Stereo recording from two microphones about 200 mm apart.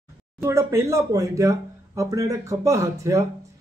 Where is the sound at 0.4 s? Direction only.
15° right (ahead or behind).